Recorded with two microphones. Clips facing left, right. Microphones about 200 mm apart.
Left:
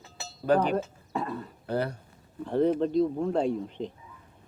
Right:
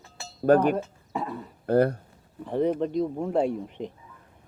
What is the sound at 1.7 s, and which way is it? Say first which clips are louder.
Speech: right 9 dB; 50° right (ahead or behind).